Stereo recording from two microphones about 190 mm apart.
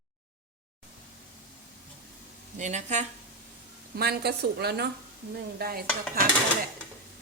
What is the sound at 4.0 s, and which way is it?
A woman's voice, 60° right (ahead or behind).